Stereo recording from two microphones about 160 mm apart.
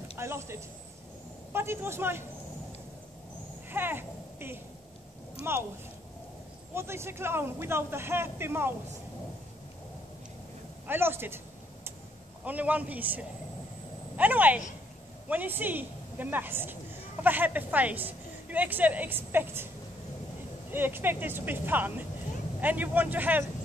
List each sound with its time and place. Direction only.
0.2 s a man's voice: 15° right (ahead or behind)
3.7 s a woman's voice: 15° right (ahead or behind)
6.7 s a woman's voice: 15° right (ahead or behind)
10.9 s a sound: 15° right (ahead or behind)
12.4 s a woman's voice: 10° right (ahead or behind)
20.7 s a woman's voice: 15° right (ahead or behind)